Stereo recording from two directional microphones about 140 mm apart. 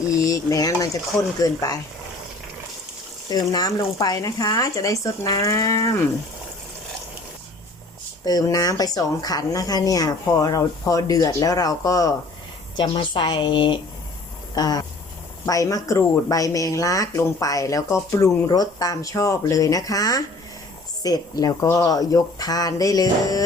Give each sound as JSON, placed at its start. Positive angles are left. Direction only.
{"t": 0.3, "sound": "a sound", "side_deg": 25}
{"t": 1.4, "sound": "speech", "side_deg": 25}
{"t": 3.2, "sound": "speech", "side_deg": 25}
{"t": 8.2, "sound": "speech", "side_deg": 25}
{"t": 12.7, "sound": "speech", "side_deg": 35}